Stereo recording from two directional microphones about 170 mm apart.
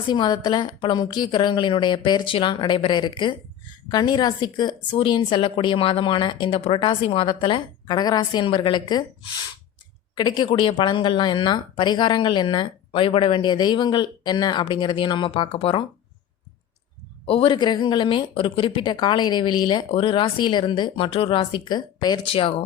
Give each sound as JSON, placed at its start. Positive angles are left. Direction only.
{"t": 0.1, "sound": "speech", "side_deg": 25}
{"t": 10.2, "sound": "speech", "side_deg": 25}
{"t": 17.2, "sound": "speech", "side_deg": 35}